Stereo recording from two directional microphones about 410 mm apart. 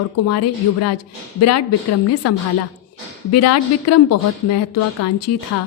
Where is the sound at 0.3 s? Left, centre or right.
Left.